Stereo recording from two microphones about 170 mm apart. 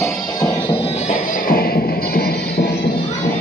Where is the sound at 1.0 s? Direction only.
55° left (ahead or behind).